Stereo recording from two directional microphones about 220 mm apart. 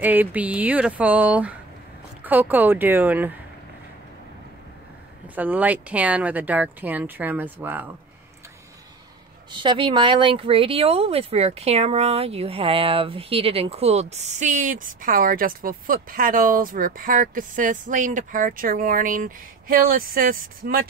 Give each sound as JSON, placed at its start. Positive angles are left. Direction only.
{"t": 0.0, "sound": "speech", "side_deg": -10}
{"t": 5.3, "sound": "speech", "side_deg": -5}
{"t": 9.5, "sound": "speech", "side_deg": -20}